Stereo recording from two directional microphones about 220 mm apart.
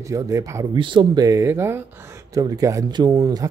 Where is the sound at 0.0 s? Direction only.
15° right (ahead or behind).